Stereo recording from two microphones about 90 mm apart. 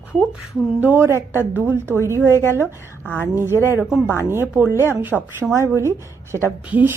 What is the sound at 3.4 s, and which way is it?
A woman's voice, 25° right (ahead or behind).